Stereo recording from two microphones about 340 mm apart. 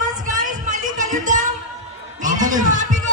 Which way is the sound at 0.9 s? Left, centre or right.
Right.